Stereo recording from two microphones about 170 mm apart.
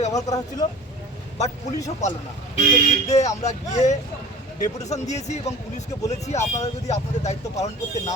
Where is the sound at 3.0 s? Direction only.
40° left (ahead or behind).